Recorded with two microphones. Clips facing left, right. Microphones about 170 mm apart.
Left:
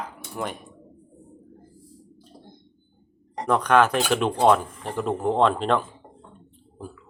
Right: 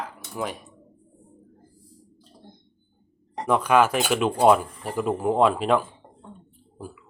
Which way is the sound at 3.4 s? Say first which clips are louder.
Even; 5° right (ahead or behind).